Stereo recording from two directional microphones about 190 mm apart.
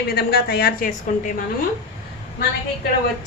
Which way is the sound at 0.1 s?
55° left (ahead or behind).